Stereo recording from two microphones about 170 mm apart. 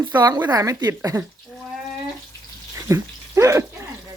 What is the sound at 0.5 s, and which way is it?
Speech, 20° right (ahead or behind).